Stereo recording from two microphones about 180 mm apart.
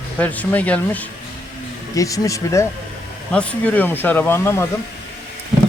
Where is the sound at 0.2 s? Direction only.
10° left (ahead or behind).